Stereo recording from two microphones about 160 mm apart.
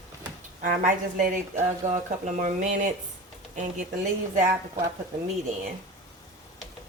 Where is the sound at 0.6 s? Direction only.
55° right (ahead or behind).